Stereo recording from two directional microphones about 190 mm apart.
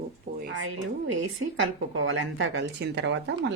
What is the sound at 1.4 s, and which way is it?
Speech, 90° right.